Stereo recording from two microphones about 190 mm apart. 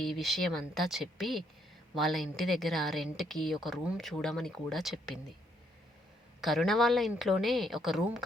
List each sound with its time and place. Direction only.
0.0 s a woman's voice: centre (ahead or behind)
6.4 s a woman's voice: centre (ahead or behind)